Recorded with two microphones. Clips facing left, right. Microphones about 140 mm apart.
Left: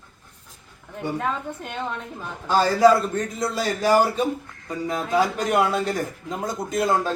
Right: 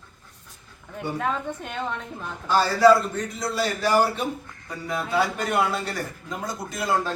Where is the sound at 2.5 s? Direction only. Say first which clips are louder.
Left 1 dB; 15° left (ahead or behind).